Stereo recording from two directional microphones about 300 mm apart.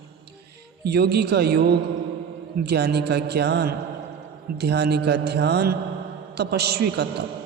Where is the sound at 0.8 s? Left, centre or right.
Right.